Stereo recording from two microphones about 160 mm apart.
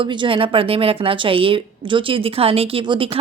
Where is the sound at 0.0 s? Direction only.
30° right (ahead or behind).